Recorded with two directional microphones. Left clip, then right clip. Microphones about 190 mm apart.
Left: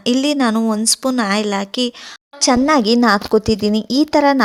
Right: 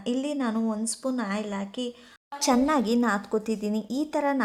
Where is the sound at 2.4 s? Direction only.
25° left (ahead or behind).